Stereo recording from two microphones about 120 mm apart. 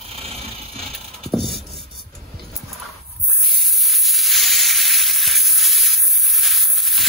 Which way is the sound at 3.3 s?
Centre (ahead or behind).